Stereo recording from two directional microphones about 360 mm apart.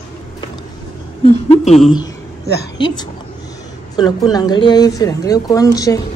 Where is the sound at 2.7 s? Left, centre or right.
Centre.